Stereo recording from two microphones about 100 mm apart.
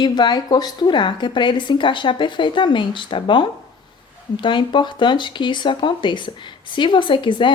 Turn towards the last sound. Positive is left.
turn(degrees=55)  # may be behind; listen again after turning